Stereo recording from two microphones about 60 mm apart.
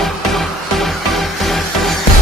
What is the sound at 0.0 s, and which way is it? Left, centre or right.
Music, centre.